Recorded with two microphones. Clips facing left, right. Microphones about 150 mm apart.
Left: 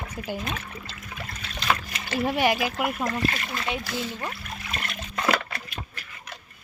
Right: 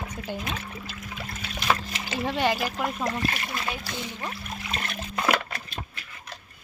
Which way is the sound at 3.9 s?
15° right (ahead or behind).